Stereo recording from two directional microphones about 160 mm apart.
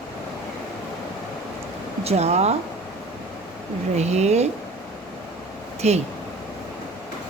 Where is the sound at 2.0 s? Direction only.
40° right (ahead or behind).